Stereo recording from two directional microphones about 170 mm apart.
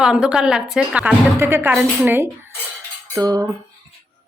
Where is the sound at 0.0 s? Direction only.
5° right (ahead or behind).